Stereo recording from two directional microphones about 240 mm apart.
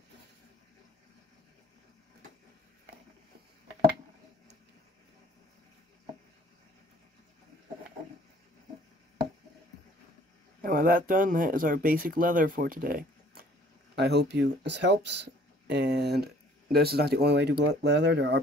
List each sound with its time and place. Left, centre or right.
10.6 s speech: right